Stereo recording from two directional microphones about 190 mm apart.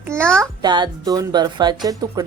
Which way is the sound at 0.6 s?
20° right (ahead or behind).